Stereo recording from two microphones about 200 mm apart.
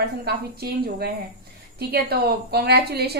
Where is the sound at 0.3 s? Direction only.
50° right (ahead or behind).